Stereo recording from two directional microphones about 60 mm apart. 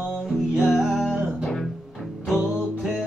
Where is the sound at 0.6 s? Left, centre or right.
Centre.